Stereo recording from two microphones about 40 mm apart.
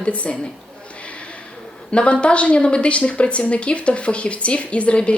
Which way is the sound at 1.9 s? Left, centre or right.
Left.